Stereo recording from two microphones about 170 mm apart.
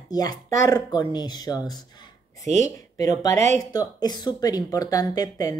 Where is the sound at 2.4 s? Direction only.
45° right (ahead or behind).